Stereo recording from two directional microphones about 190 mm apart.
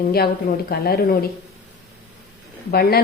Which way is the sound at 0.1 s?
55° left (ahead or behind).